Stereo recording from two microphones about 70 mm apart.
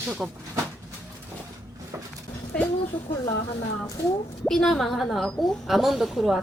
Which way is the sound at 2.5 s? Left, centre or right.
Centre.